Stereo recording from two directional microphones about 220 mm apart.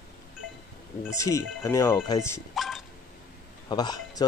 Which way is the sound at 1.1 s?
15° left (ahead or behind).